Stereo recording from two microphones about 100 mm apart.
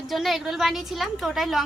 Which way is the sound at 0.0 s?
Centre (ahead or behind).